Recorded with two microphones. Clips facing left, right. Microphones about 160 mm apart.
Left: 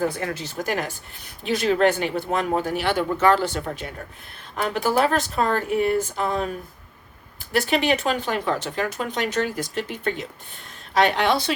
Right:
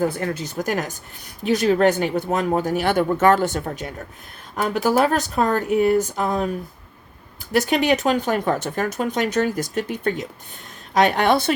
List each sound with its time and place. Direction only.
0.2 s speech: 40° right (ahead or behind)
7.7 s speech: 40° right (ahead or behind)